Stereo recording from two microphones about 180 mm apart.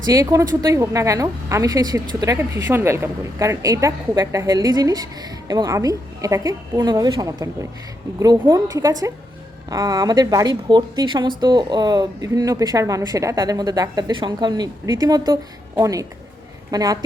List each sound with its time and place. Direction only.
0.1 s a woman's voice: 20° right (ahead or behind)